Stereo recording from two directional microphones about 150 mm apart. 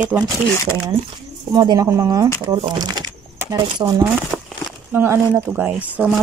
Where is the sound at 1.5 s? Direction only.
25° right (ahead or behind).